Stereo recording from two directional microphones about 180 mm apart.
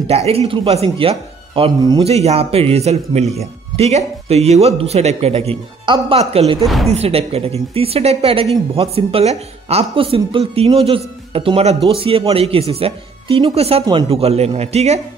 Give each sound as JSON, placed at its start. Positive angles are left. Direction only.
{"t": 0.0, "sound": "speech", "side_deg": -35}
{"t": 6.6, "sound": "speech", "side_deg": 0}
{"t": 6.9, "sound": "speech", "side_deg": -35}